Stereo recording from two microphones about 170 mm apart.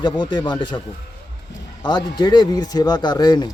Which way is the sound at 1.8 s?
25° left (ahead or behind).